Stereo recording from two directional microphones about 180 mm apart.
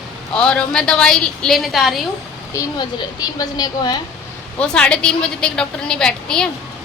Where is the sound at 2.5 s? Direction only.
20° left (ahead or behind).